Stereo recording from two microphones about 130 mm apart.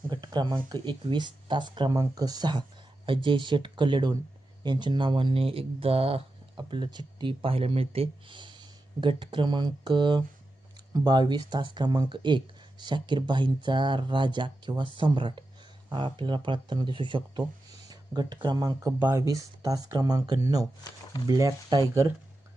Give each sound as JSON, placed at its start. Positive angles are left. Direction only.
{"t": 0.1, "sound": "speech", "side_deg": -35}